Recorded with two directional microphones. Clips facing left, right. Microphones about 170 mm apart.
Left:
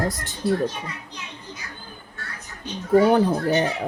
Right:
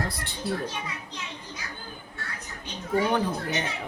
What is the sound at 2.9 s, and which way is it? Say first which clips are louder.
Speech: left 8 dB; 40° left (ahead or behind).